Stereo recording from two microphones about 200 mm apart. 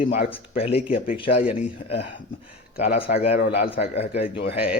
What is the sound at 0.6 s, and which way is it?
A man's voice, 30° left (ahead or behind).